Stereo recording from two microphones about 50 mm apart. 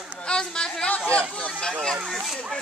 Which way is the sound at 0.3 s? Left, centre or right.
Centre.